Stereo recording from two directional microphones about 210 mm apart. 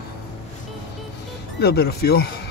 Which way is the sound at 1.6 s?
50° left (ahead or behind).